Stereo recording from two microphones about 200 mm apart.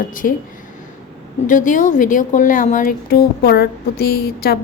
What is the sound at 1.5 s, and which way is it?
A woman's voice, 40° left (ahead or behind).